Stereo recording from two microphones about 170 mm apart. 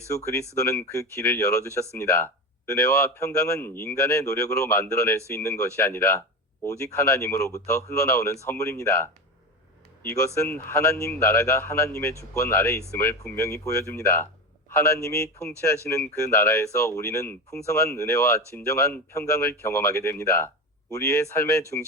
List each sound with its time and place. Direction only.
0.5 s speech: 20° left (ahead or behind)